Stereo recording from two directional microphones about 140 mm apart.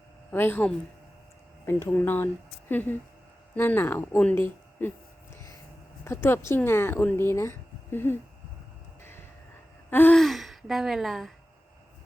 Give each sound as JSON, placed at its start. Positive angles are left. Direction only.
{"t": 0.3, "sound": "a woman's voice", "side_deg": 15}
{"t": 6.2, "sound": "a woman's voice", "side_deg": 15}
{"t": 9.9, "sound": "gasp", "side_deg": 15}
{"t": 10.2, "sound": "a sound", "side_deg": 0}